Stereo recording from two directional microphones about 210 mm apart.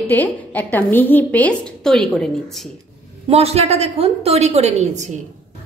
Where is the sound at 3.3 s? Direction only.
30° right (ahead or behind).